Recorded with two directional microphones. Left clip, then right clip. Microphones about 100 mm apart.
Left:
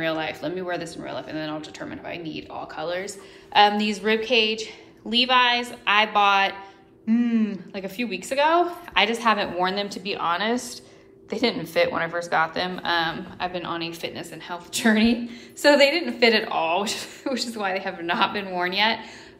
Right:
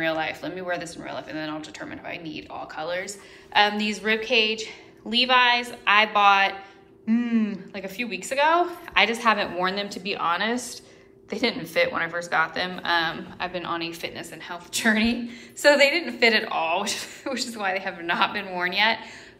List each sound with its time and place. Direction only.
0.0 s speech: 45° left (ahead or behind); by 7.6 s 25° left (ahead or behind)
7.7 s speech: 40° left (ahead or behind)